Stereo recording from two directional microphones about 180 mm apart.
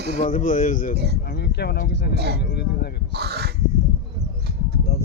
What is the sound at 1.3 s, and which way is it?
Speech, 65° left (ahead or behind).